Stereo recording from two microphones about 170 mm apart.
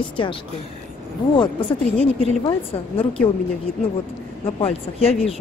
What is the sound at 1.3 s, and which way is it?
A woman's voice, 30° left (ahead or behind).